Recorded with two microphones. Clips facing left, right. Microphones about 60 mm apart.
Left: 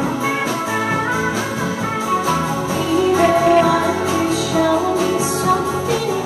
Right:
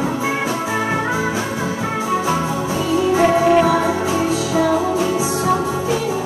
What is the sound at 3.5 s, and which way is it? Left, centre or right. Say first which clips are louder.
Music: left 1 dB; centre.